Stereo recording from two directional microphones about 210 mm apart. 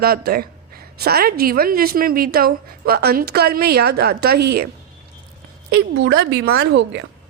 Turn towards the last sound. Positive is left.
turn(degrees=-55)  # may be behind; listen again after turning